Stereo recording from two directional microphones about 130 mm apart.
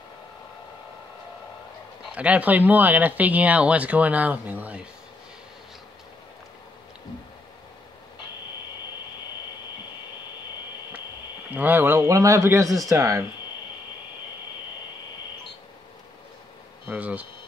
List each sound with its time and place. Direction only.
2.1 s speech: 10° right (ahead or behind)
11.5 s speech: 15° right (ahead or behind)
16.8 s speech: 10° right (ahead or behind)